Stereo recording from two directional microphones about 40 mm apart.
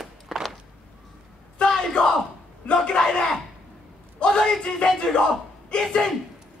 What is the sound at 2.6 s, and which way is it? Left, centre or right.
Speech, left.